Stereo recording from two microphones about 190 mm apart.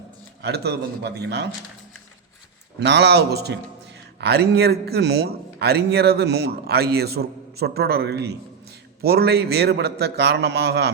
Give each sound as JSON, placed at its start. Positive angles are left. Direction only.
{"t": 0.4, "sound": "a man's voice", "side_deg": -60}
{"t": 2.7, "sound": "a man's voice", "side_deg": -65}